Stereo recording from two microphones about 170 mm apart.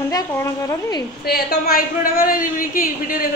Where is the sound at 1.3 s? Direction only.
65° left (ahead or behind).